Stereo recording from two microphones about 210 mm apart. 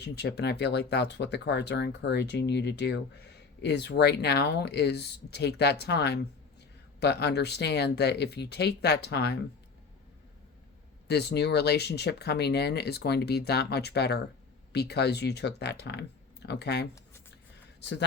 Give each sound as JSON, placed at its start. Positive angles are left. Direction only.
{"t": 0.0, "sound": "speech", "side_deg": 55}
{"t": 11.1, "sound": "speech", "side_deg": 50}